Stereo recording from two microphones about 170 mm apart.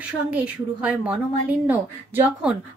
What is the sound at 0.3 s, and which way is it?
A woman's voice, 10° right (ahead or behind).